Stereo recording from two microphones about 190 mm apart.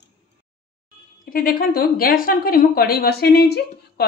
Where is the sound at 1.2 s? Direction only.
50° left (ahead or behind).